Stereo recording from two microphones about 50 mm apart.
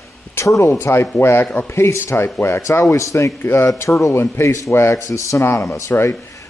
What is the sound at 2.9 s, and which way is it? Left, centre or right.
Speech, left.